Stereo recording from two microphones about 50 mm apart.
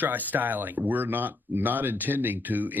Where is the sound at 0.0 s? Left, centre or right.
Right.